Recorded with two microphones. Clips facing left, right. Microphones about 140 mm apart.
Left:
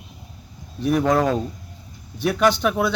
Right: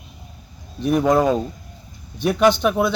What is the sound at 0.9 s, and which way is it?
Speech, 15° right (ahead or behind).